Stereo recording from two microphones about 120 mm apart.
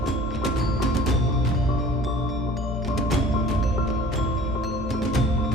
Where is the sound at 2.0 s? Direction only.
Centre (ahead or behind).